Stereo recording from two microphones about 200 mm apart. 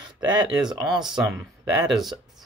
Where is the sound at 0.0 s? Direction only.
20° right (ahead or behind).